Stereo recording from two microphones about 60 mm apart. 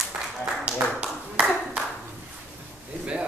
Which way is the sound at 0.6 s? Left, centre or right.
Centre.